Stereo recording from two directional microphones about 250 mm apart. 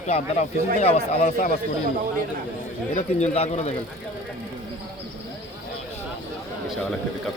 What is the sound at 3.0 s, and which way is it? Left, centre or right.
Speech, left.